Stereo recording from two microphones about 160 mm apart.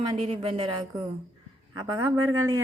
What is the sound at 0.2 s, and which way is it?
Speech, 45° right (ahead or behind).